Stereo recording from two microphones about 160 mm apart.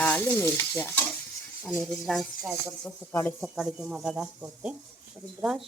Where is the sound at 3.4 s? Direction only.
5° right (ahead or behind).